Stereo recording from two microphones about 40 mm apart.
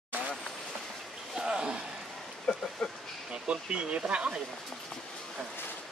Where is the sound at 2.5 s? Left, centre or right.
Centre.